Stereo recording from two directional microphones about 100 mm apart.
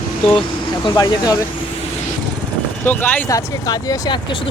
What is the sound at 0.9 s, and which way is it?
Speech, 40° left (ahead or behind).